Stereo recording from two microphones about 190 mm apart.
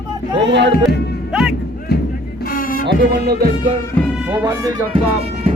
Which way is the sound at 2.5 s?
50° left (ahead or behind).